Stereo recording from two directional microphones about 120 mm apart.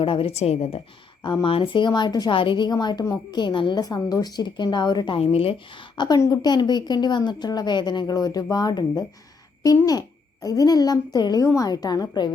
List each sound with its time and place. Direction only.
0.0 s a woman's voice: 50° left (ahead or behind)
1.2 s a woman's voice: 40° left (ahead or behind)